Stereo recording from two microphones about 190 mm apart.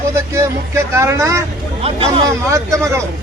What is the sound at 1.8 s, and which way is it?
Speech, 30° right (ahead or behind).